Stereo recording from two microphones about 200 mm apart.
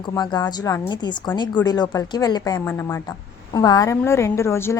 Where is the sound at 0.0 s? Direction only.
20° left (ahead or behind).